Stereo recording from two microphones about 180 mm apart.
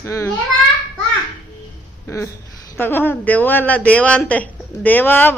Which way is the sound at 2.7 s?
10° left (ahead or behind).